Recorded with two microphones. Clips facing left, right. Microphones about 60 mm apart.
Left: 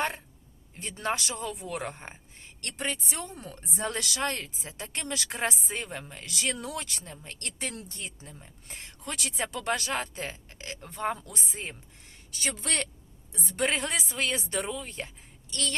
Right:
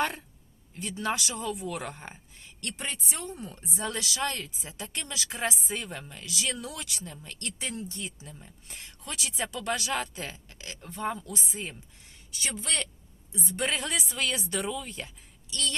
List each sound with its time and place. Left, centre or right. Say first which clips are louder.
0.8 s speech: even; left
2.6 s a woman's voice: left 3 dB; left
3.8 s speech: left 1 dB; left
9.0 s speech: left 1 dB; left
10.8 s speech: left 1 dB; left
12.3 s speech: left 1 dB; left
13.7 s speech: left 1 dB; left